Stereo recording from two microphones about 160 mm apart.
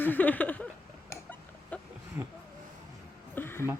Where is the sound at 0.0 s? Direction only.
10° left (ahead or behind).